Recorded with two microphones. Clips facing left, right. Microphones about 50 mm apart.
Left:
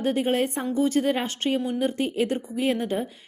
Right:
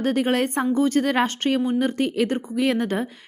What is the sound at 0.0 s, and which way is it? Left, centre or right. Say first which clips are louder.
A woman's voice: right 2 dB; right.